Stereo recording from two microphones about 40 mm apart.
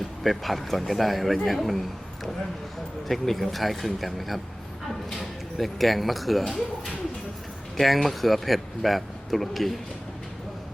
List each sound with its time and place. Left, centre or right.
0.2 s speech: centre
3.1 s speech: centre
5.5 s speech: centre